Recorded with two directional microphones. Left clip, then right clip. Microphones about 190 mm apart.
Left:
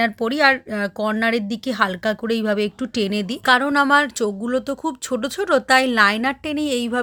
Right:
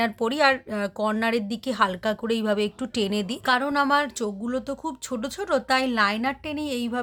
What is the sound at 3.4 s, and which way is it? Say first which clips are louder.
Speech: left 6 dB; 35° left (ahead or behind).